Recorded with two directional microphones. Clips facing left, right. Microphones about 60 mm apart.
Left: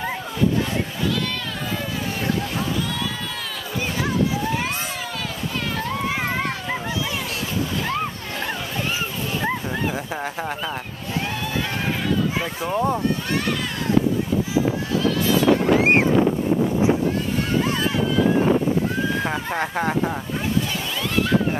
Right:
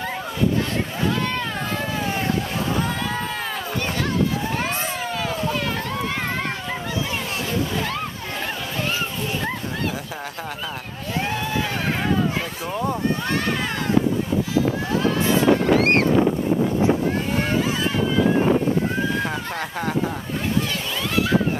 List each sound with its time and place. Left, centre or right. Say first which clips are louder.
12.6 s speech: left 4 dB; centre
15.8 s boat: left 1 dB; centre
19.2 s speech: left 3 dB; left